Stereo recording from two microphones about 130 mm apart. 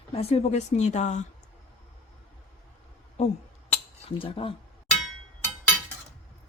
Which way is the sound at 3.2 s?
55° left (ahead or behind).